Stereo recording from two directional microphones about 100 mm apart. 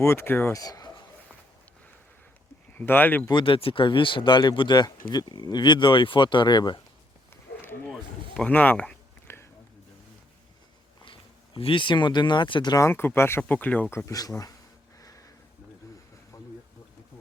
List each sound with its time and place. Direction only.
0.0 s speech: 25° left (ahead or behind)
0.5 s speech: 40° left (ahead or behind)
2.7 s speech: 20° left (ahead or behind)
3.3 s speech: 60° left (ahead or behind)
8.4 s speech: 15° left (ahead or behind)
9.2 s a sound: 25° left (ahead or behind)
11.0 s speech: 60° left (ahead or behind)
12.9 s speech: 20° left (ahead or behind)
14.0 s speech: 35° left (ahead or behind)
15.0 s a sound: 35° left (ahead or behind)
16.3 s a sound: 35° left (ahead or behind)